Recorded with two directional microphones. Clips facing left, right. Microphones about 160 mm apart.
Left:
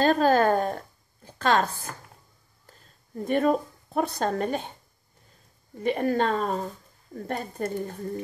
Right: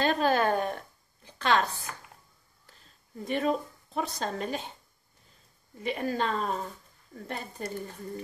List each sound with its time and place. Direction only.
0.0 s a sound: 40° left (ahead or behind)
2.6 s speech: 45° left (ahead or behind)
5.8 s speech: 50° left (ahead or behind)